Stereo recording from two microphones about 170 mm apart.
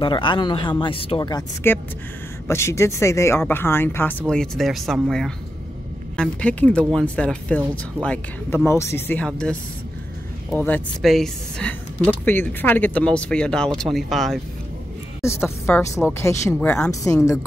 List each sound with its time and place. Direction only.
0.0 s speech: 30° left (ahead or behind)
1.6 s speech: 15° left (ahead or behind)
11.0 s speech: centre (ahead or behind)
15.2 s speech: 15° left (ahead or behind)